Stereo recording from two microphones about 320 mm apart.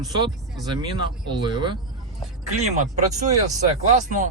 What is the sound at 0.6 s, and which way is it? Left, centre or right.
Speech, centre.